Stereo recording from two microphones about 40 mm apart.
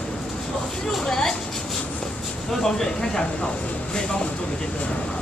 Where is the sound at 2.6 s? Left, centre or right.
Centre.